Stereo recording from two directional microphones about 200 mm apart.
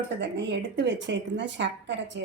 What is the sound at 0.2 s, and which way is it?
A woman's voice, 60° right (ahead or behind).